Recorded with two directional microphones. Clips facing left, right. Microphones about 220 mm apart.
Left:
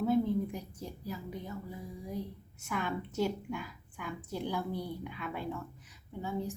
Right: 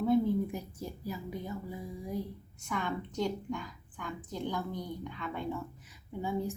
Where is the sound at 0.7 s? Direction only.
10° right (ahead or behind).